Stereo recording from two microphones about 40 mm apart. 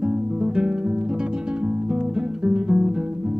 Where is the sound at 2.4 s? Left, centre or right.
Right.